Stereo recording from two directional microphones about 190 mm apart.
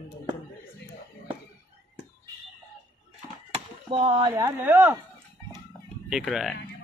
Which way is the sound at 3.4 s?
30° right (ahead or behind).